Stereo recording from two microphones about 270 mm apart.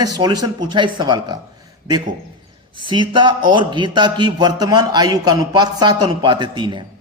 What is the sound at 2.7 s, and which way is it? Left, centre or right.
Speech, centre.